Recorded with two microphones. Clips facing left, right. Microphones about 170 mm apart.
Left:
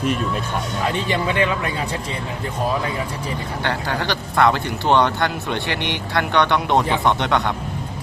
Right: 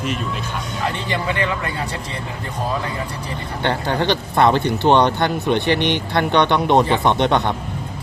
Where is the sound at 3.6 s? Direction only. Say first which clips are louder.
Right 5 dB; 20° right (ahead or behind).